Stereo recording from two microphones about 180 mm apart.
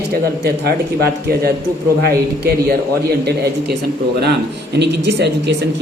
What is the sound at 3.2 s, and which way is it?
Speech, 65° right (ahead or behind).